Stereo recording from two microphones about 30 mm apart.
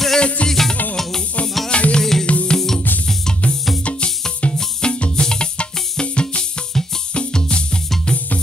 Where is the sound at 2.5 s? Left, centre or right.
Centre.